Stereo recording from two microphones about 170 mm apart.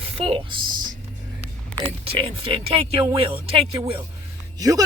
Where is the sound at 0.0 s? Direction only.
35° right (ahead or behind).